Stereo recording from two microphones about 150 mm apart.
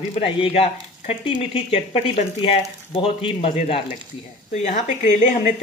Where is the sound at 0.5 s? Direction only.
40° left (ahead or behind).